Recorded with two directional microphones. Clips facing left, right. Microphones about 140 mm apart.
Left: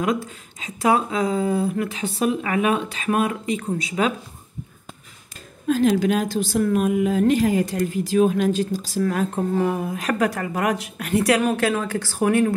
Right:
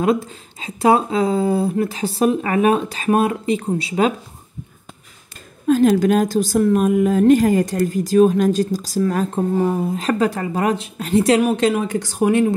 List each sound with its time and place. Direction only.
0.0 s speech: 30° right (ahead or behind)
5.7 s a woman's voice: 45° right (ahead or behind); by 12.5 s 20° right (ahead or behind)